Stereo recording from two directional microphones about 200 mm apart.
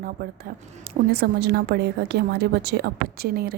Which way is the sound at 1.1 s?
55° right (ahead or behind).